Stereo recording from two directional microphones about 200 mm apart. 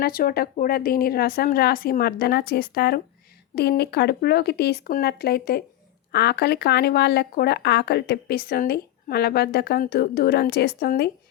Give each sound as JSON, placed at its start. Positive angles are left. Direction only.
{"t": 0.0, "sound": "speech", "side_deg": 45}